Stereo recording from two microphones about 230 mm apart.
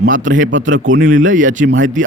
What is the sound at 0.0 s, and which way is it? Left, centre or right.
Speech, right.